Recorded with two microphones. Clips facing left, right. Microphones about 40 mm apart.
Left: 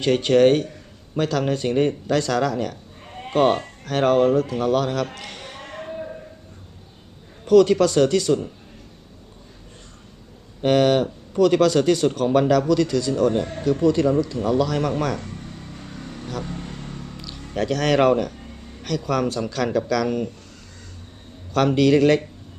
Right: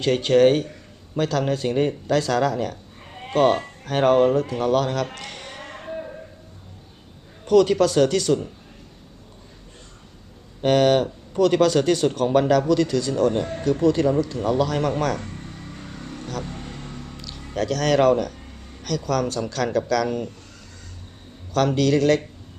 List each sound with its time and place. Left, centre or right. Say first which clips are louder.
0.0 s speech: left 1 dB; centre
3.8 s speech: even; centre
7.4 s speech: left 2 dB; centre
10.6 s speech: even; centre
15.2 s vehicle: even; right
15.4 s vehicle: even; centre
17.1 s a sound: left 1 dB; centre
17.5 s speech: even; centre
21.7 s speech: left 4 dB; centre